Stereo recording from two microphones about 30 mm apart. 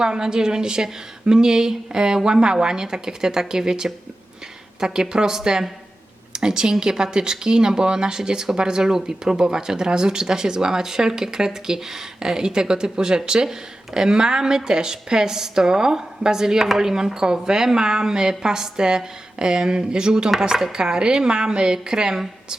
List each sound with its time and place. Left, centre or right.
0.0 s speech: right